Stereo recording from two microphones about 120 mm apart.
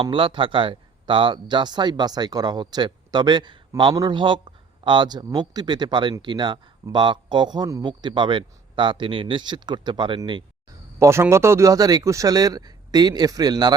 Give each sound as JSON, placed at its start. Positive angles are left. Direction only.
{"t": 0.0, "sound": "speech", "side_deg": -45}
{"t": 11.0, "sound": "speech", "side_deg": -20}